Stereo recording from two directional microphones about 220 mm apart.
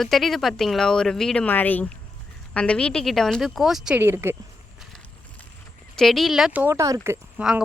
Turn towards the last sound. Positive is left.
turn(degrees=-5)  # may be behind; listen again after turning